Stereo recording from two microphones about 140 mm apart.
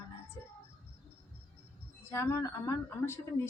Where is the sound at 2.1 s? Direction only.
20° left (ahead or behind).